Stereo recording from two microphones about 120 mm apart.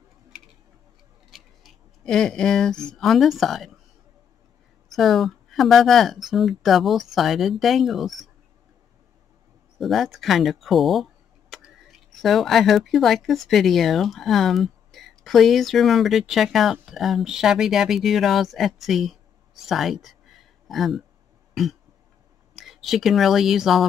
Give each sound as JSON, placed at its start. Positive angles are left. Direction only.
{"t": 1.3, "sound": "speech", "side_deg": 0}
{"t": 4.8, "sound": "speech", "side_deg": 0}
{"t": 9.8, "sound": "speech", "side_deg": 0}